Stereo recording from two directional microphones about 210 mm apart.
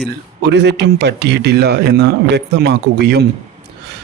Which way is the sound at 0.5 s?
55° right (ahead or behind).